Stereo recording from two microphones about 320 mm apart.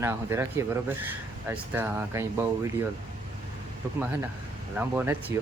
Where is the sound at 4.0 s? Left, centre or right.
Centre.